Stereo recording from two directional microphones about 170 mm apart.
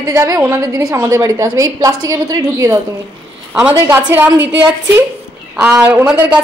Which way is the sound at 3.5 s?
10° right (ahead or behind).